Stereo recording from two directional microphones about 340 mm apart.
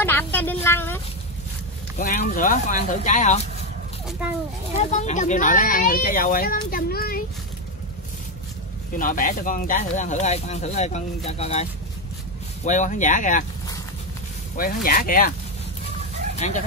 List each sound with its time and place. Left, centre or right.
0.0 s a sound: centre
2.0 s speech: left
4.7 s speech: left
8.9 s speech: left
12.6 s speech: left
14.6 s speech: left
16.3 s speech: left